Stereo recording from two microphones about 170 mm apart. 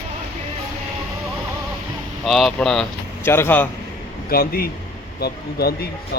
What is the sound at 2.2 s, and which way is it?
Speech, centre (ahead or behind).